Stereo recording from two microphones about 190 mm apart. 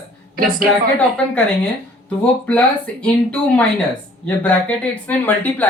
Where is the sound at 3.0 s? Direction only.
5° left (ahead or behind).